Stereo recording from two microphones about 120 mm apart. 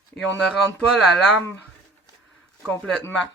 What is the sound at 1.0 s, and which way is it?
Speech, centre (ahead or behind).